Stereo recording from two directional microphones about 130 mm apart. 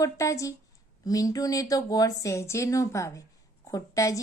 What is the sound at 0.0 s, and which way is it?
A woman's voice, 25° left (ahead or behind).